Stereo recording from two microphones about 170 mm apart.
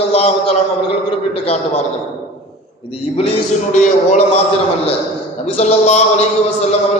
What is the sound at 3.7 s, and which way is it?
Speech, 45° left (ahead or behind).